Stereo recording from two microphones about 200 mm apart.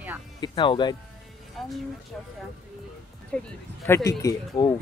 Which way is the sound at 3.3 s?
10° left (ahead or behind).